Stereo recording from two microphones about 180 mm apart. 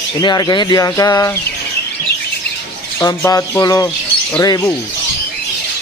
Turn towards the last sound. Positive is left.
turn(degrees=20)  # may be behind; listen again after turning